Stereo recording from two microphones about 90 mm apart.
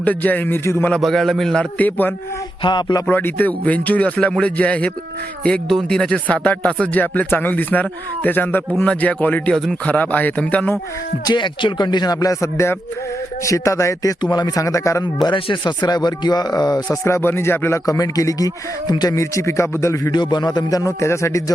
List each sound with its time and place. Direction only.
0.0 s a man's voice: 20° left (ahead or behind)
0.9 s a man's voice: 5° left (ahead or behind)
1.8 s a man's voice: 20° left (ahead or behind)
2.6 s speech: 55° left (ahead or behind)
3.1 s speech: 20° left (ahead or behind)
9.5 s speech: 5° left (ahead or behind)
11.3 s a man's voice: 60° left (ahead or behind); by 14.2 s 35° left (ahead or behind)
14.2 s a man's voice: 50° left (ahead or behind)
15.0 s a man's voice: 55° left (ahead or behind)
17.0 s a man's voice: 30° left (ahead or behind)
17.8 s a man's voice: 40° left (ahead or behind)
19.1 s a man's voice: 35° left (ahead or behind)
20.1 s a man's voice: 50° left (ahead or behind); by 21.5 s 35° left (ahead or behind)